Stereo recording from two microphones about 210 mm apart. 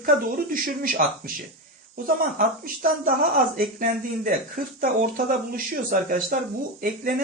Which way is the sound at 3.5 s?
40° right (ahead or behind).